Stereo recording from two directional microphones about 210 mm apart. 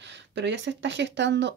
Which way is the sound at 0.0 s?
55° right (ahead or behind).